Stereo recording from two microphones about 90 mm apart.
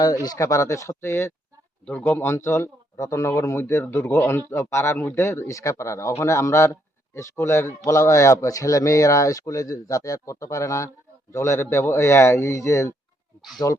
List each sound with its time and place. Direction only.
0.0 s speech: 45° left (ahead or behind)
1.8 s speech: 15° left (ahead or behind); by 13.8 s 35° left (ahead or behind)